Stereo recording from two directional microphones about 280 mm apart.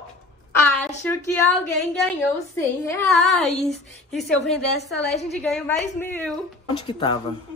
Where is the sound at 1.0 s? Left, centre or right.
Centre.